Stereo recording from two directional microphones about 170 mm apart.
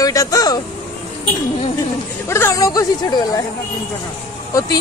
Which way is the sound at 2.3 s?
15° left (ahead or behind).